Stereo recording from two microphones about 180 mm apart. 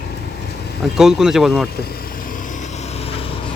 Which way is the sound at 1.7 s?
60° left (ahead or behind).